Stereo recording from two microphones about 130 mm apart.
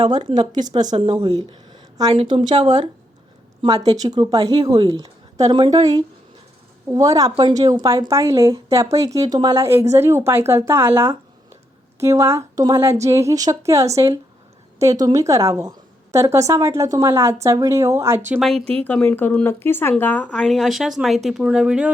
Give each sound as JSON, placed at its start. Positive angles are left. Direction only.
{"t": 0.0, "sound": "a woman's voice", "side_deg": -35}
{"t": 0.9, "sound": "speech", "side_deg": -45}
{"t": 3.9, "sound": "a woman's voice", "side_deg": -30}
{"t": 4.7, "sound": "a woman's voice", "side_deg": -45}
{"t": 18.3, "sound": "speech", "side_deg": 5}
{"t": 20.4, "sound": "speech", "side_deg": 0}